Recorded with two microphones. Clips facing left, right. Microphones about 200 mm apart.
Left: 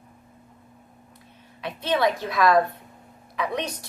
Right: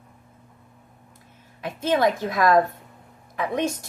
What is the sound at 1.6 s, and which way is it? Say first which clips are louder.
A woman's voice: right 2 dB; 45° right (ahead or behind).